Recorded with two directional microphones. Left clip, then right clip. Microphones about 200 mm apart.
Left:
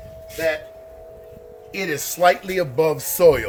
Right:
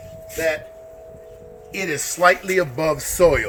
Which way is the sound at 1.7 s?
15° left (ahead or behind).